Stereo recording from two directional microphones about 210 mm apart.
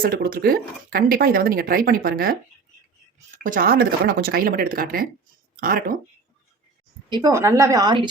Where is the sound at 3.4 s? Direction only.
40° right (ahead or behind).